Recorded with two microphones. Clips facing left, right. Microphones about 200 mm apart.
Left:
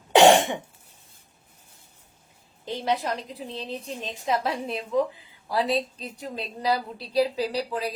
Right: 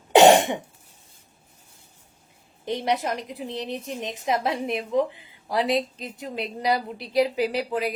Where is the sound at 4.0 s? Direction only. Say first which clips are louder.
Right 1 dB; 20° right (ahead or behind).